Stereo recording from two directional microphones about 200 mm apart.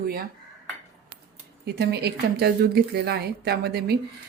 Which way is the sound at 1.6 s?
55° right (ahead or behind).